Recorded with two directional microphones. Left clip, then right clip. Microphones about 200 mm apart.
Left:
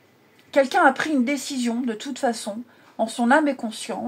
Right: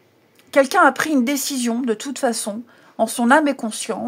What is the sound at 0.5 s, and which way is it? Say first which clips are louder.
Speech: right 3 dB; 50° right (ahead or behind).